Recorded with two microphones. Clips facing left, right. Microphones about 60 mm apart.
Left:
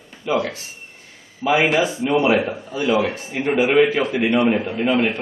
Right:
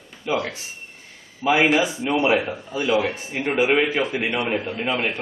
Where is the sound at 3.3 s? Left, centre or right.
Centre.